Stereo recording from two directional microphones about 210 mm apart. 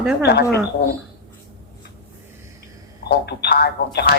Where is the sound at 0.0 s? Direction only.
5° right (ahead or behind).